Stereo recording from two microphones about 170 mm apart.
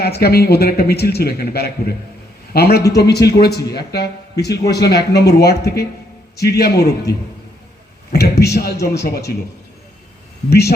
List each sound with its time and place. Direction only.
0.2 s speech: 70° left (ahead or behind)
8.1 s speech: 70° left (ahead or behind)